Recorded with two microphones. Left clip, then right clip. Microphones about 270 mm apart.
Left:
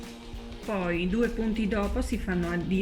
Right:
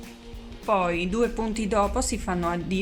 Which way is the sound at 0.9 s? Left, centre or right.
Centre.